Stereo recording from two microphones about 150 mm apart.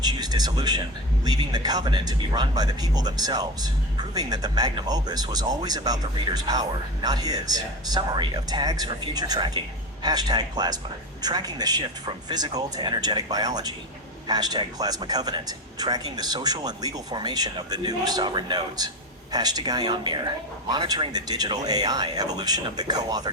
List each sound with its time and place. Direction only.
0.0 s speech: 25° right (ahead or behind)